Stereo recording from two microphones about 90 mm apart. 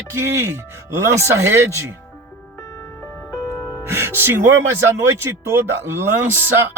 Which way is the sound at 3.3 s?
30° left (ahead or behind).